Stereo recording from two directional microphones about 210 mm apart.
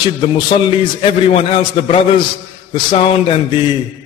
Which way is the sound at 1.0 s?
30° left (ahead or behind).